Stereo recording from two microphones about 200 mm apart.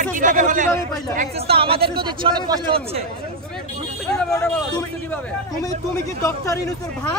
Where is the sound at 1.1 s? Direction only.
30° right (ahead or behind).